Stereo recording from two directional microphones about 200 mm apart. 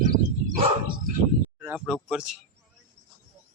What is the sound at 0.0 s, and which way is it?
Dog, 40° right (ahead or behind).